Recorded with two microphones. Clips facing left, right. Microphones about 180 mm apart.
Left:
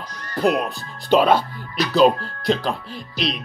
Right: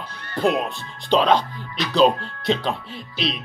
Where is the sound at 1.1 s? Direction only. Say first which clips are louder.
Left 2 dB; 10° left (ahead or behind).